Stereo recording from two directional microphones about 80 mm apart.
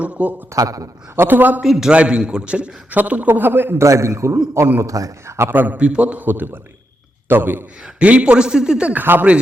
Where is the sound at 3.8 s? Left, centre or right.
Right.